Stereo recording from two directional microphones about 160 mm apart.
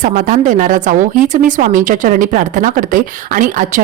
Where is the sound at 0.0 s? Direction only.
55° right (ahead or behind).